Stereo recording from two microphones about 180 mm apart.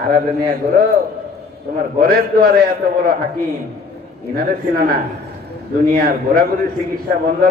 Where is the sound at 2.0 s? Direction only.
55° right (ahead or behind).